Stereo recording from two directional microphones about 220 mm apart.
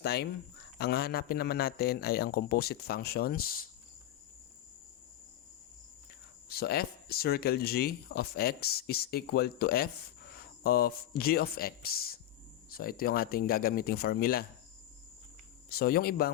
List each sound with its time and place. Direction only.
0.0 s speech: 45° left (ahead or behind)
6.5 s speech: 45° left (ahead or behind)
10.3 s a sound: 45° left (ahead or behind)
11.2 s speech: 45° left (ahead or behind)
15.7 s speech: 45° left (ahead or behind)